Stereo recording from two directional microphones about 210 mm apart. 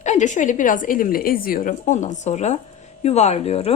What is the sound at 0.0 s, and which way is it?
A woman's voice, 35° left (ahead or behind).